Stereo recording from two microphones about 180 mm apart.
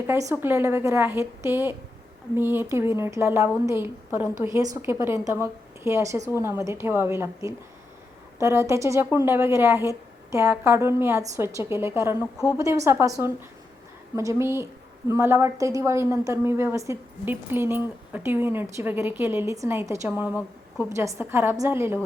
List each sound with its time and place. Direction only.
0.1 s a woman's voice: 15° right (ahead or behind)
12.2 s a woman's voice: 15° left (ahead or behind)
12.5 s a woman's voice: 15° right (ahead or behind)